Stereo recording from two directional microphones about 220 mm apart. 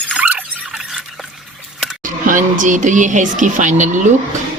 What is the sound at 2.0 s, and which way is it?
Speech, 35° right (ahead or behind).